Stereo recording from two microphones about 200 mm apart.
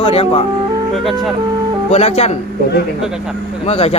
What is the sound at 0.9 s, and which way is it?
Speech, centre (ahead or behind).